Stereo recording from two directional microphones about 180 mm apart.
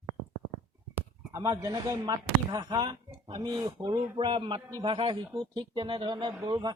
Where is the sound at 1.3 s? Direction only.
15° right (ahead or behind).